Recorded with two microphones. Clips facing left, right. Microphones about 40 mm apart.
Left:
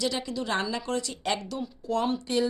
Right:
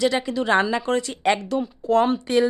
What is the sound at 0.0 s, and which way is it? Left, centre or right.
Speech, right.